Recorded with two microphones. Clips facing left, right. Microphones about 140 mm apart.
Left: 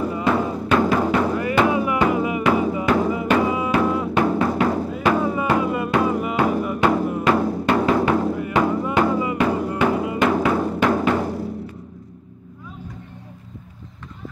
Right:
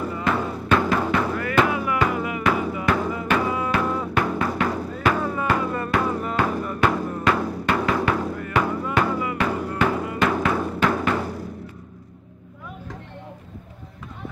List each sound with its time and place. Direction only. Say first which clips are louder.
0.0 s music: left 4 dB; 15° left (ahead or behind)
3.8 s music: left 4 dB; 5° left (ahead or behind)
4.1 s music: left 4 dB; 25° left (ahead or behind)
5.2 s music: left 3 dB; 15° left (ahead or behind)
6.8 s music: left 3 dB; 25° left (ahead or behind)
7.1 s music: left 3 dB; 10° left (ahead or behind)
7.3 s music: left 5 dB; 25° left (ahead or behind)